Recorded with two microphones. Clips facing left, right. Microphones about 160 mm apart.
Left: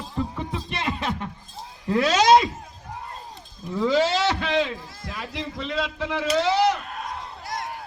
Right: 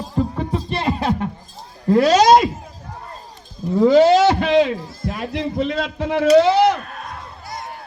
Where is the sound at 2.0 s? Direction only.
35° right (ahead or behind).